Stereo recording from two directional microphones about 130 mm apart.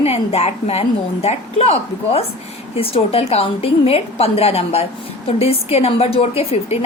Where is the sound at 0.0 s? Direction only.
50° left (ahead or behind).